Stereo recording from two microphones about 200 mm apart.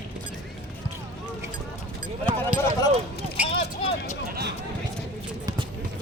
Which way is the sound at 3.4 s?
30° left (ahead or behind).